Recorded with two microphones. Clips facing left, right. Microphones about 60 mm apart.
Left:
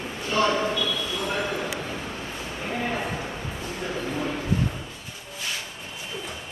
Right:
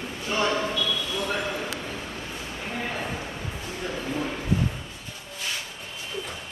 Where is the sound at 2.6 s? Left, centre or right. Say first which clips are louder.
Left 3 dB; centre.